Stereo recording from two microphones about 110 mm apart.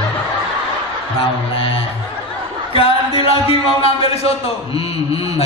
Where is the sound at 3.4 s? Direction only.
60° left (ahead or behind).